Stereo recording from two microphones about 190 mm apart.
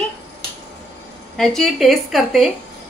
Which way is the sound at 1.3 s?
Centre (ahead or behind).